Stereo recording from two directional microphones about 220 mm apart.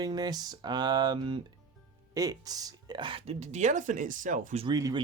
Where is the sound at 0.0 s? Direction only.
20° right (ahead or behind); by 4.6 s 35° right (ahead or behind).